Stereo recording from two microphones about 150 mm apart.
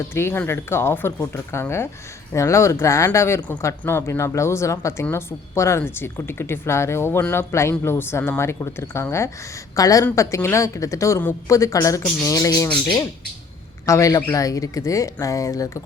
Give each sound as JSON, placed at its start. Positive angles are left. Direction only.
{"t": 0.1, "sound": "a woman's voice", "side_deg": 15}
{"t": 13.8, "sound": "speech", "side_deg": 20}